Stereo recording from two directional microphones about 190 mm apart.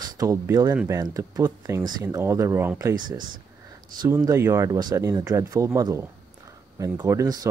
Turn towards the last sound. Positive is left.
turn(degrees=-20)  # may be behind; listen again after turning